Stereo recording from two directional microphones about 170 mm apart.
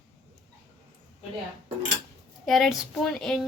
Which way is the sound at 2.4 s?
Centre (ahead or behind).